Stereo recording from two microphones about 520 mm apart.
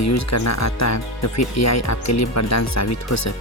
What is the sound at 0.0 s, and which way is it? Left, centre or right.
Speech, left.